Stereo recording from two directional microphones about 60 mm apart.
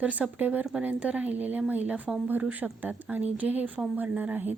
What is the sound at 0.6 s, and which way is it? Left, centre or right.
Speech, centre.